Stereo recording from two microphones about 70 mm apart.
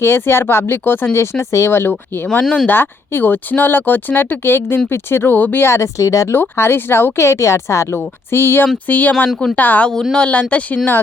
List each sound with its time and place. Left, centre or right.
0.0 s speech: left
2.4 s speech: centre
2.6 s speech: left
5.6 s speech: left
6.3 s speech: left
8.9 s speech: left
9.9 s speech: centre